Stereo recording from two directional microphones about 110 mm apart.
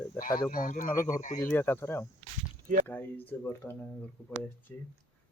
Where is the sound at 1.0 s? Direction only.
20° left (ahead or behind).